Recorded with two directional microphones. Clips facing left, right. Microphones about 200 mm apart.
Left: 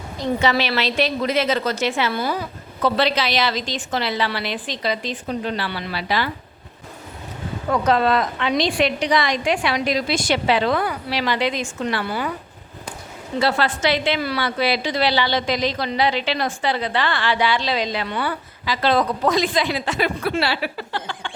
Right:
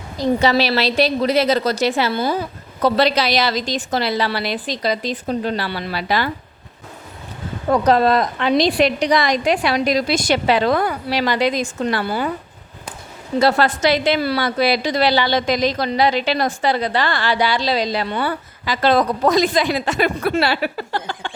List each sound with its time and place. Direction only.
0.2 s a woman's voice: 35° right (ahead or behind)
2.8 s a woman's voice: 40° right (ahead or behind)
7.7 s a woman's voice: 40° right (ahead or behind)
13.4 s a woman's voice: 40° right (ahead or behind)